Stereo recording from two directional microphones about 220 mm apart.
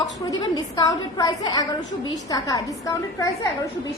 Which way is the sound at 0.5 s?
15° left (ahead or behind).